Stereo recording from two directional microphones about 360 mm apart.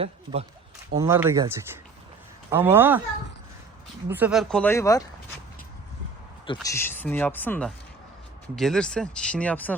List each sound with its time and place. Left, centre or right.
0.0 s speech: centre
4.1 s speech: centre
6.4 s speech: centre